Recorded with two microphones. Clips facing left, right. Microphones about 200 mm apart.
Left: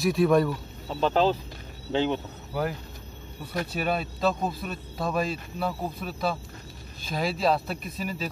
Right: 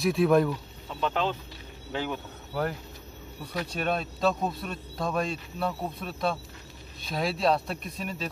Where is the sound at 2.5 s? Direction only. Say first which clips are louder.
Left 1 dB; 5° left (ahead or behind).